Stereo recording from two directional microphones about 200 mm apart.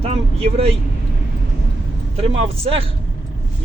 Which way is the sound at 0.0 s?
30° right (ahead or behind).